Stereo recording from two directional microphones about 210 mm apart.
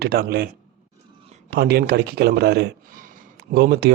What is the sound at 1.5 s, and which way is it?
A man's voice, 50° right (ahead or behind).